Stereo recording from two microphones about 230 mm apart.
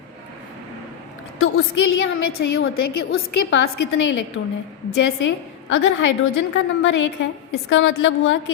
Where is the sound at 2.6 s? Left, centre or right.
Left.